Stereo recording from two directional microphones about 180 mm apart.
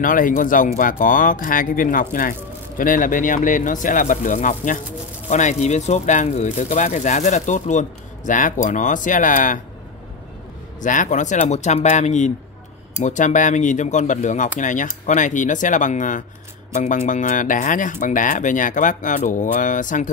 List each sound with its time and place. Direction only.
0.0 s speech: 50° left (ahead or behind)
10.8 s speech: 45° left (ahead or behind)